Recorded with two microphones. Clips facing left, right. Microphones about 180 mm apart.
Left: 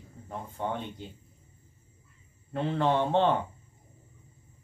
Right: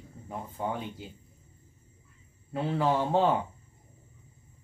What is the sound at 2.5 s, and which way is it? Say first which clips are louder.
Speech: left 1 dB; 5° right (ahead or behind).